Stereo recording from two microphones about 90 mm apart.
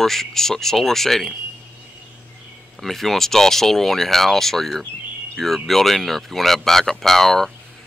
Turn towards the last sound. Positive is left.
turn(degrees=5)  # may be behind; listen again after turning